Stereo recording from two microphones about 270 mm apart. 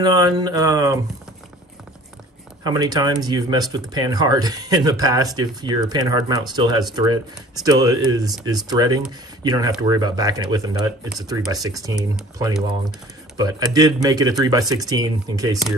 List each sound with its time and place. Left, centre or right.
0.0 s speech: centre
2.6 s speech: centre
13.4 s speech: centre